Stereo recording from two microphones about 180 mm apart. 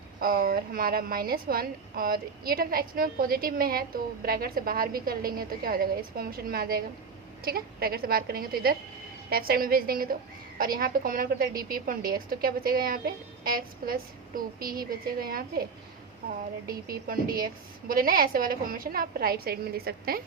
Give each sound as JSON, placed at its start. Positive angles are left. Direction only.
{"t": 0.2, "sound": "a woman's voice", "side_deg": -55}
{"t": 16.6, "sound": "a woman's voice", "side_deg": -55}